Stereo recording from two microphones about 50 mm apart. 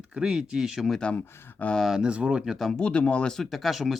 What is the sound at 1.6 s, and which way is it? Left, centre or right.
Speech, left.